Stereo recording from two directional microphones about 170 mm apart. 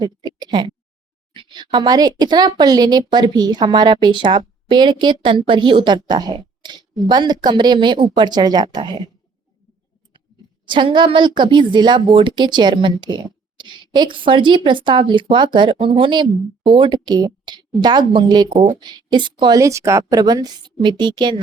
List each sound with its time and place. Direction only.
0.0 s speech: 25° right (ahead or behind)
10.7 s speech: 30° right (ahead or behind)